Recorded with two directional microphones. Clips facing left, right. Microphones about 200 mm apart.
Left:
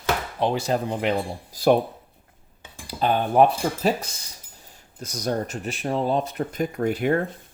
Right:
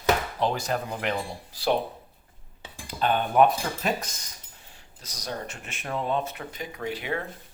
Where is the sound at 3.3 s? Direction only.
30° left (ahead or behind).